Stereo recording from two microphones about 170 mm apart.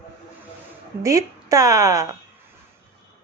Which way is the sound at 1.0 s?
20° right (ahead or behind).